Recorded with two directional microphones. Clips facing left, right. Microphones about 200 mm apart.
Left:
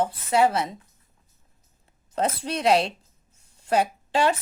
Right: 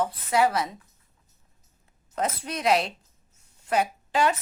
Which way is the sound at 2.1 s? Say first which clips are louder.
Left 3 dB; 30° left (ahead or behind).